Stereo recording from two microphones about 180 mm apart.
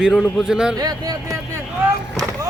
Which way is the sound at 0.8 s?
20° right (ahead or behind).